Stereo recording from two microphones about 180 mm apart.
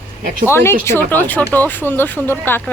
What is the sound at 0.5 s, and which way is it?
Speech, 15° left (ahead or behind).